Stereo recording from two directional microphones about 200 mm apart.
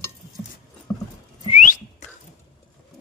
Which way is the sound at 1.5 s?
40° left (ahead or behind).